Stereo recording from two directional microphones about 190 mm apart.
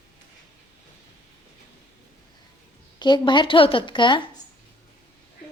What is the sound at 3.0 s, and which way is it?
A woman's voice, 25° left (ahead or behind).